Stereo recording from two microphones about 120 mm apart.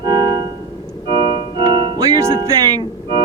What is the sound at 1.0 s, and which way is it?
Keyboard, 45° right (ahead or behind).